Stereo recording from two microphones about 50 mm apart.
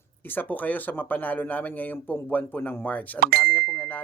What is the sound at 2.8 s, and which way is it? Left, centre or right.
Speech, left.